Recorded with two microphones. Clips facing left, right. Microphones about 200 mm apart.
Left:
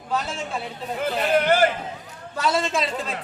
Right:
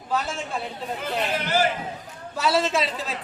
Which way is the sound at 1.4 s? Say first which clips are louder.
Left 5 dB; 55° left (ahead or behind).